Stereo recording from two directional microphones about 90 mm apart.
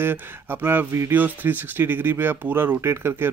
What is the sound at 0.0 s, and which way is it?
Speech, 25° right (ahead or behind).